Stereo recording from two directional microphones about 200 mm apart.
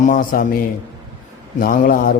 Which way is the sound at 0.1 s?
45° left (ahead or behind).